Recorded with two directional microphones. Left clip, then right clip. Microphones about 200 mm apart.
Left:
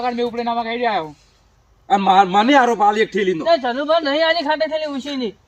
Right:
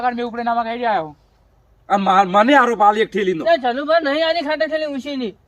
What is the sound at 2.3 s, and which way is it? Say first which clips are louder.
Speech: right 1 dB; 10° right (ahead or behind).